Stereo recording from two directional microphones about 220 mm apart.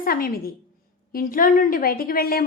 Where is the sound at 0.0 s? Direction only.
40° left (ahead or behind).